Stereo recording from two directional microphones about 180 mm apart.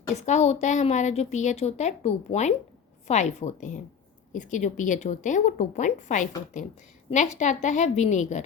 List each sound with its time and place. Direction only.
0.1 s a woman's voice: 40° left (ahead or behind)